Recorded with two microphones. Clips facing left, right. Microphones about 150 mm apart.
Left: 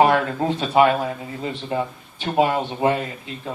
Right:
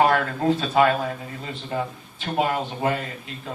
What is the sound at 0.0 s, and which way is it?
Speech, 25° left (ahead or behind).